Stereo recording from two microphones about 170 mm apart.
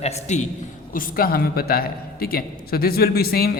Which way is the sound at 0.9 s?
55° left (ahead or behind).